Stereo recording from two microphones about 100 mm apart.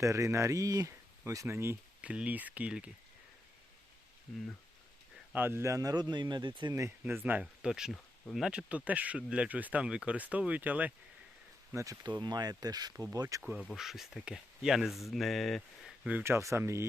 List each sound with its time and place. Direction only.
0.0 s speech: 30° right (ahead or behind)
2.0 s speech: 15° right (ahead or behind)
5.3 s speech: 20° right (ahead or behind); by 6.7 s 50° right (ahead or behind)
7.0 s speech: 20° right (ahead or behind)
7.6 s speech: 5° right (ahead or behind)
11.7 s speech: 30° right (ahead or behind)
12.0 s speech: 45° right (ahead or behind)
13.4 s speech: 15° right (ahead or behind)
13.7 s speech: centre (ahead or behind)
16.0 s speech: 20° right (ahead or behind)